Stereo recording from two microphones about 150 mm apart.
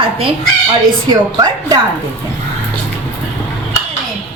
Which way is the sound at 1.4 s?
25° right (ahead or behind).